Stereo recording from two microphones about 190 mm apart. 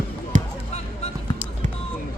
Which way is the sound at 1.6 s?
40° right (ahead or behind).